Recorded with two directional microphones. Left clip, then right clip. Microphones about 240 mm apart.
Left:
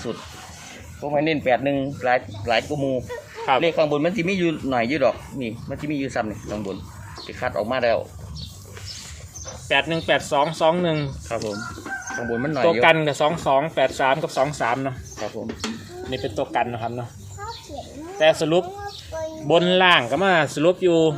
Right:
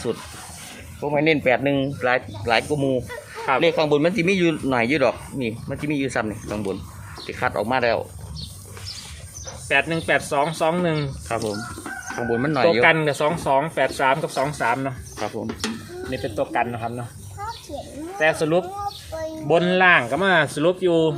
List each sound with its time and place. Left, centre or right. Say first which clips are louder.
1.0 s speech: right 2 dB; right
9.6 s speech: even; centre
11.3 s speech: right 2 dB; right
12.8 s speech: left 1 dB; centre
16.0 s speech: right 1 dB; centre
18.2 s speech: left 2 dB; centre